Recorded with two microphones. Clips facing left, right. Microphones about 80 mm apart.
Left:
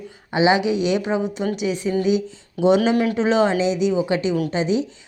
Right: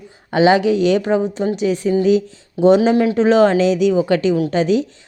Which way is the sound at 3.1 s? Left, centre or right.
Right.